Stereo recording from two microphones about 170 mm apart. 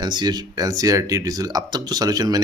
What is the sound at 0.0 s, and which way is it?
Speech, 25° right (ahead or behind).